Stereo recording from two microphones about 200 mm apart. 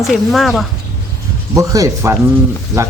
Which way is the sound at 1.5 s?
15° right (ahead or behind).